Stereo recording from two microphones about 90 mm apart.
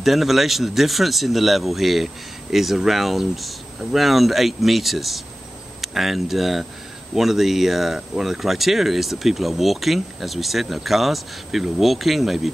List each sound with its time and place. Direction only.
0.0 s speech: centre (ahead or behind)